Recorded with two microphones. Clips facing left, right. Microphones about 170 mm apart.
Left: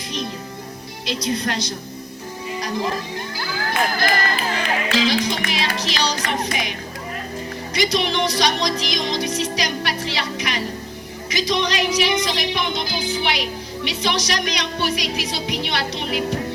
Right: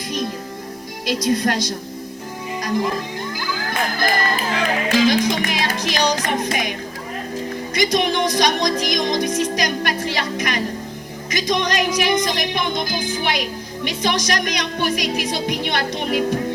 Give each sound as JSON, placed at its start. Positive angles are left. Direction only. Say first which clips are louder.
{"t": 1.0, "sound": "music", "louder": "right 5 dB", "side_deg": -50}
{"t": 3.7, "sound": "speech", "louder": "left 1 dB", "side_deg": -50}
{"t": 4.9, "sound": "music", "louder": "right 5 dB", "side_deg": -50}
{"t": 7.8, "sound": "music", "louder": "right 2 dB", "side_deg": -50}